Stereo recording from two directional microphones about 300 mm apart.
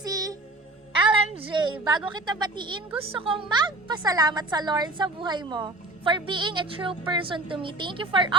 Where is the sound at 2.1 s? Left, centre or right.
Centre.